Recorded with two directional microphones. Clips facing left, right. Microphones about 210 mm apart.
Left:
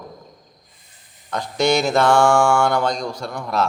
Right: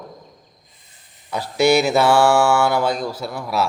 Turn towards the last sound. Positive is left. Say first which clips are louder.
# even
turn(degrees=-5)  # may be behind; listen again after turning